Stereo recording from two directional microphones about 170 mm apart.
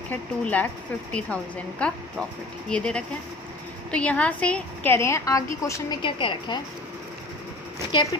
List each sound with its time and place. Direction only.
0.1 s a woman's voice: 10° left (ahead or behind)
6.0 s a woman's voice: 30° left (ahead or behind)